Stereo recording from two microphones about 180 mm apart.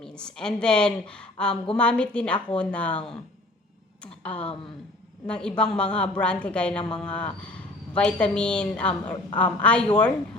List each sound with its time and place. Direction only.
0.0 s a woman's voice: 5° left (ahead or behind)